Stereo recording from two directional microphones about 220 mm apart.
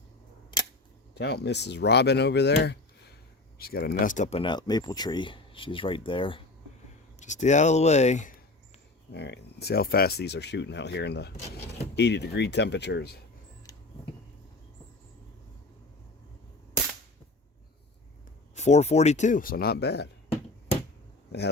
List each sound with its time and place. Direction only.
1.1 s speech: 50° left (ahead or behind)
9.1 s speech: 50° left (ahead or behind)
18.5 s speech: 30° left (ahead or behind); by 20.1 s 50° left (ahead or behind)